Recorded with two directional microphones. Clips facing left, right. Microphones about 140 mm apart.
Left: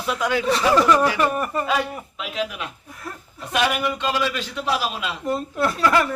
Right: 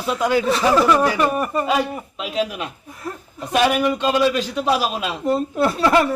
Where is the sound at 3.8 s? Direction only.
25° right (ahead or behind).